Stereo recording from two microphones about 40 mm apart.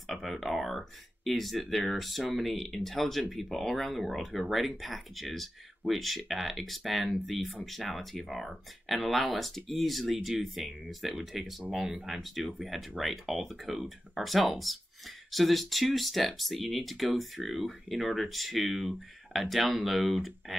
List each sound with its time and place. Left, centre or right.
0.0 s speech: centre
11.8 s speech: centre
12.1 s speech: centre